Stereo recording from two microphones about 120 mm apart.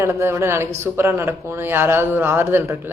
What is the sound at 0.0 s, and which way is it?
A woman's voice, 20° right (ahead or behind).